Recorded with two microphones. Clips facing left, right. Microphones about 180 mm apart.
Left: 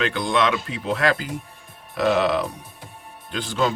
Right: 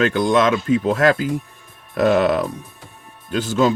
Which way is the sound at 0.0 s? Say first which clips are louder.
Right 6 dB; 45° right (ahead or behind).